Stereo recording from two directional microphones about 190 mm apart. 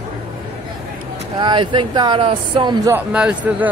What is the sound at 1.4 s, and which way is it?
Speech, 25° right (ahead or behind).